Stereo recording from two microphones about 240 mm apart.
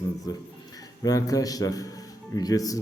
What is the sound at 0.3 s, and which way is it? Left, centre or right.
A man's voice, centre.